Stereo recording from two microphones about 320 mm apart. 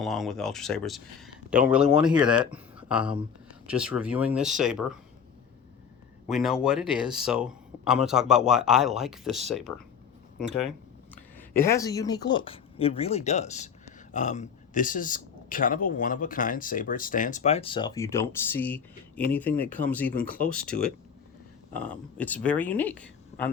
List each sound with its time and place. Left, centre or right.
0.0 s speech: centre
6.2 s speech: centre
10.4 s speech: left
11.3 s speech: centre